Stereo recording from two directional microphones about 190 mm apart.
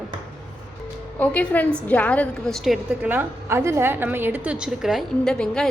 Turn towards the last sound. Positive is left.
turn(degrees=5)  # may be behind; listen again after turning